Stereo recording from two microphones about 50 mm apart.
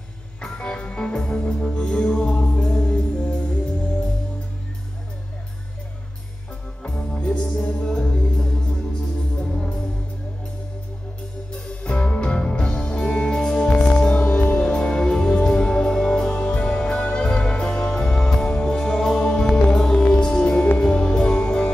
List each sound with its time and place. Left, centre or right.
0.4 s music: centre
6.9 s music: centre
9.5 s music: left
11.5 s music: centre